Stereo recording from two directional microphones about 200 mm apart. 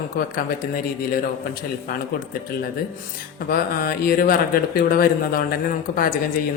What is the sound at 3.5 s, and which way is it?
Speech, 45° left (ahead or behind).